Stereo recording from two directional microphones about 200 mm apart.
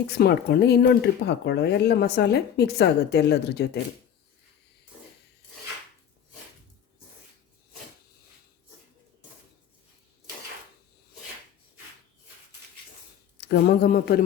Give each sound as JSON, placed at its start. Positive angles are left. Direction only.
{"t": 0.1, "sound": "speech", "side_deg": 55}
{"t": 13.5, "sound": "speech", "side_deg": 50}